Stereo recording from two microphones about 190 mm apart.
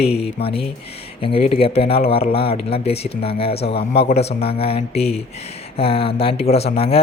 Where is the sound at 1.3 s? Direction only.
30° left (ahead or behind).